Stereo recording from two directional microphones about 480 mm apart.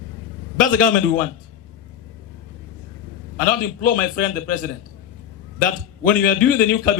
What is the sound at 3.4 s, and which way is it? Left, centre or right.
A man's voice, centre.